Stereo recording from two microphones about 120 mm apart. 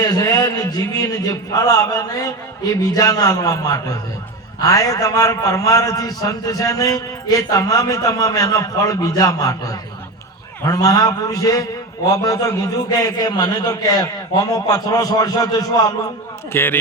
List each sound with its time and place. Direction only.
0.0 s a man's voice: 35° left (ahead or behind)
16.5 s a man's voice: 20° left (ahead or behind)